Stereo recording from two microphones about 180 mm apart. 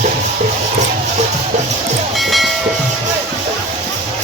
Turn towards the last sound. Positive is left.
turn(degrees=0)  # may be behind; listen again after turning